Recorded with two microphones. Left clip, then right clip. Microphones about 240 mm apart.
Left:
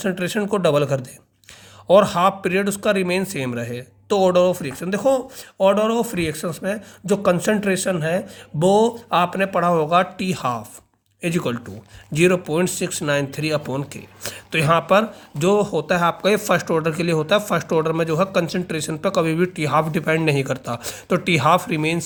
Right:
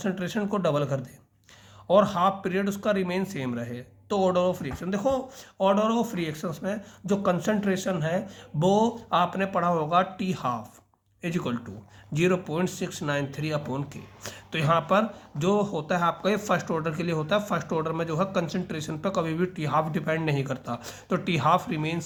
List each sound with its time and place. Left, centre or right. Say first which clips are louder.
0.0 s speech: left 7 dB; left